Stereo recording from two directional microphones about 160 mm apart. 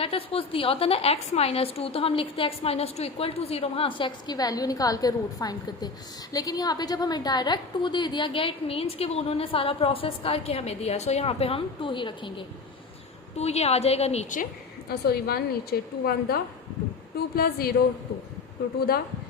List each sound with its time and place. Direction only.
0.0 s a woman's voice: 35° left (ahead or behind)
13.3 s a woman's voice: 40° left (ahead or behind)
14.8 s a woman's voice: 80° left